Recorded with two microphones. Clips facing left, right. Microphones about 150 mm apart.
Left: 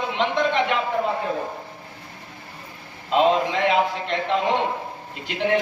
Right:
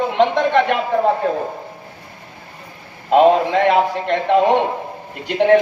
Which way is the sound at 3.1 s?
55° right (ahead or behind).